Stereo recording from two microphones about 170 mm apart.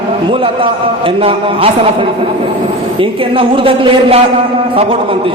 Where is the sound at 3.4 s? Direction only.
30° right (ahead or behind).